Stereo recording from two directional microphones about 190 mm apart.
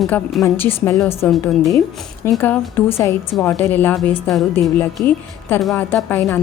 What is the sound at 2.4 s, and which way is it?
A woman's voice, 10° left (ahead or behind).